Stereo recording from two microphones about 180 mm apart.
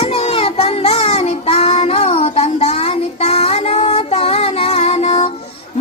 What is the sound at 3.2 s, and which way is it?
Music, 35° left (ahead or behind).